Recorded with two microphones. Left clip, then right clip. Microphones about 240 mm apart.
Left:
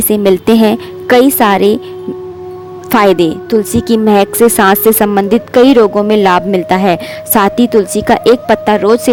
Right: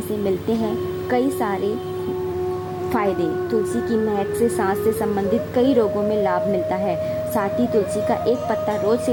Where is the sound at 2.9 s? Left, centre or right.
Left.